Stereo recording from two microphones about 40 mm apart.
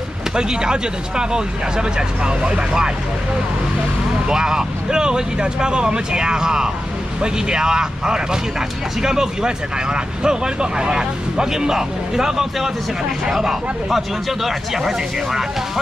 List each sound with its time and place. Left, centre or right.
0.4 s speech: centre
4.3 s speech: centre